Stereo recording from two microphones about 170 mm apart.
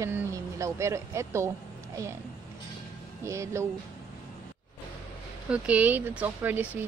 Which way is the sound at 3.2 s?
15° right (ahead or behind).